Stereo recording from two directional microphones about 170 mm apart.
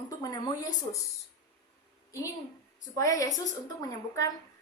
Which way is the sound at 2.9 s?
20° left (ahead or behind).